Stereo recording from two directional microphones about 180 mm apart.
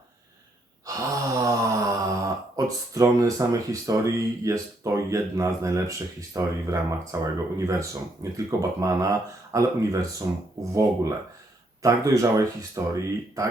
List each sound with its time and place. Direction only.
0.9 s speech: 20° right (ahead or behind)
11.8 s speech: 20° right (ahead or behind)